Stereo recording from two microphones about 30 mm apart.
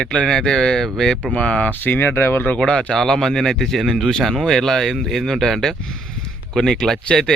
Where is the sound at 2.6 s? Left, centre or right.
Left.